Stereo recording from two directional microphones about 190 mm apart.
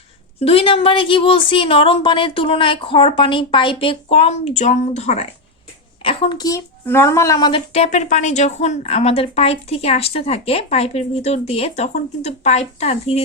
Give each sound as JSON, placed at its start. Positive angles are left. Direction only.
{"t": 0.3, "sound": "a woman's voice", "side_deg": 30}